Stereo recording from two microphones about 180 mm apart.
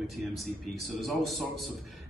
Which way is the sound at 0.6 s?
Centre (ahead or behind).